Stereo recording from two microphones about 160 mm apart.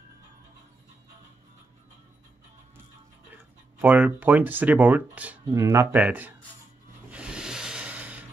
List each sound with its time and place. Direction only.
3.8 s speech: 10° right (ahead or behind)
7.1 s rub: 5° right (ahead or behind)